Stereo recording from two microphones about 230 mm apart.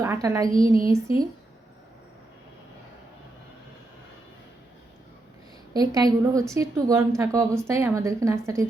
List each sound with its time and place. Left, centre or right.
0.0 s a woman's voice: centre
5.7 s a woman's voice: centre